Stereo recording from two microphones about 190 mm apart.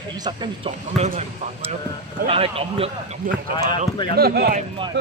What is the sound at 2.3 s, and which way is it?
Speech, 30° right (ahead or behind).